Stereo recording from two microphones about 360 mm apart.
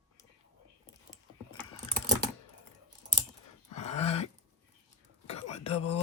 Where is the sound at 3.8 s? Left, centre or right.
Centre.